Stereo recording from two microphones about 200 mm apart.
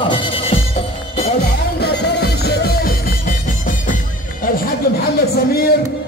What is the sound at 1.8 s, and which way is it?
Music, 55° left (ahead or behind).